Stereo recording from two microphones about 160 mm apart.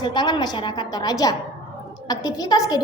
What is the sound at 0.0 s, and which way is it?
A woman's voice, 25° left (ahead or behind).